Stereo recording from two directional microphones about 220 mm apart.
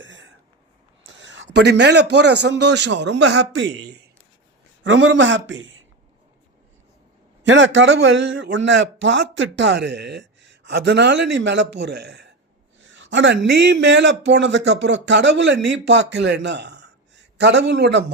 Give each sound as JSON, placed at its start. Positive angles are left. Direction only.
{"t": 0.0, "sound": "a sound", "side_deg": -55}
{"t": 1.0, "sound": "a man's voice", "side_deg": -55}
{"t": 7.4, "sound": "a man's voice", "side_deg": -60}